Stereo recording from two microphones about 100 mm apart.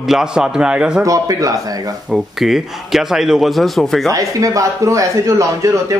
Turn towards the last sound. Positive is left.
turn(degrees=-35)  # may be behind; listen again after turning